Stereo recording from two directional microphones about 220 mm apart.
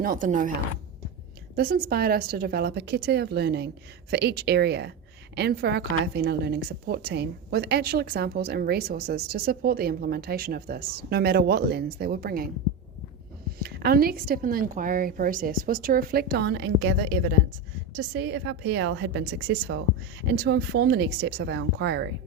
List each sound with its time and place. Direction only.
0.0 s a woman's voice: 40° right (ahead or behind)
1.5 s a woman's voice: 45° right (ahead or behind)
13.6 s a woman's voice: 45° right (ahead or behind)
17.9 s a woman's voice: 45° right (ahead or behind)